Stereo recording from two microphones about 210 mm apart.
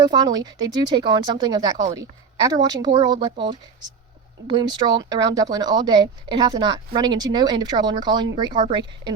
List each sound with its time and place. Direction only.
0.1 s speech: 20° right (ahead or behind)